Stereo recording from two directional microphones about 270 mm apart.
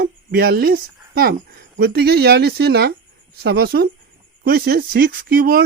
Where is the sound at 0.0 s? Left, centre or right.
Right.